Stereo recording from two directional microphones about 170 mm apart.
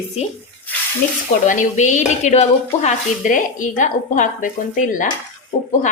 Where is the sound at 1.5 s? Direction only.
45° left (ahead or behind).